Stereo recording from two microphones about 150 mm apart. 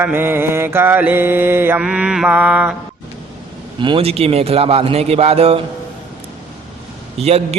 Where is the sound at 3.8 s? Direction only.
35° right (ahead or behind).